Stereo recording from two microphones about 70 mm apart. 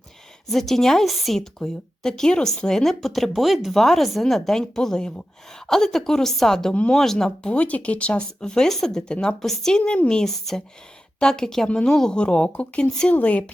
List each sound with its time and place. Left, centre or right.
0.4 s a woman's voice: centre